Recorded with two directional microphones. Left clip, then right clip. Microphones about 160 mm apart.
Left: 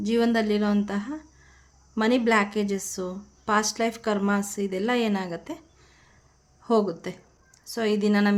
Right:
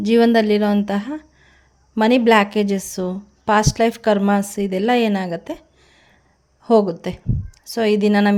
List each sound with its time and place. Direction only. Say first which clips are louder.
0.0 s a woman's voice: right 9 dB; 40° right (ahead or behind)